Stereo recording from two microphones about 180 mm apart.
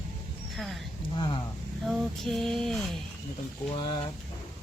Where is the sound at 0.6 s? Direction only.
Centre (ahead or behind).